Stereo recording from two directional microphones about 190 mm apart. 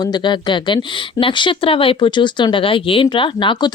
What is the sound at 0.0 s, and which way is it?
Speech, 25° left (ahead or behind).